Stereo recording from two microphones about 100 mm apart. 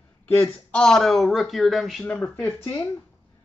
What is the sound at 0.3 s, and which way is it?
Speech, 20° left (ahead or behind).